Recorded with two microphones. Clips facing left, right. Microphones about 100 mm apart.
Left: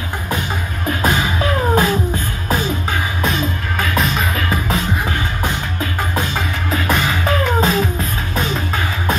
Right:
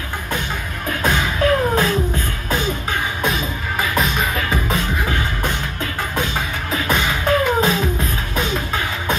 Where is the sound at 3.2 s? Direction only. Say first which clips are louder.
Left 2 dB; centre (ahead or behind).